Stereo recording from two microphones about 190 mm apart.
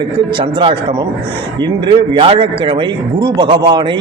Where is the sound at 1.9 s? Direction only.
25° right (ahead or behind).